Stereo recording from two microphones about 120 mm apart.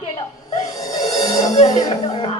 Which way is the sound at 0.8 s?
30° left (ahead or behind).